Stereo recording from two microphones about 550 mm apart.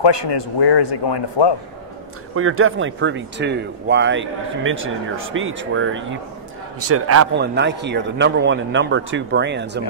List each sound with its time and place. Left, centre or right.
0.0 s a man's voice: left
2.3 s speech: right